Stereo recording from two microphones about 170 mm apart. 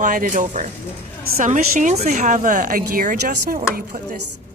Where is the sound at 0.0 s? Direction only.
50° right (ahead or behind).